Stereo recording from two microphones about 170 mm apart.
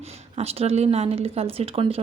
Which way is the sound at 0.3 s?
35° right (ahead or behind).